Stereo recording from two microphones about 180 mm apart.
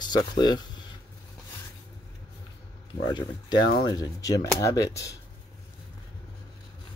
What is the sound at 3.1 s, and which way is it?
Speech, 25° left (ahead or behind).